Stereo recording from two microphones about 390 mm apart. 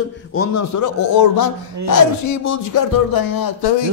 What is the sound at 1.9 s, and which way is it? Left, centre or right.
A man's voice, left.